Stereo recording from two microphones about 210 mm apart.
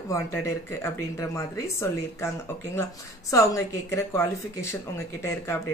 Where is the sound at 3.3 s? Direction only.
15° left (ahead or behind).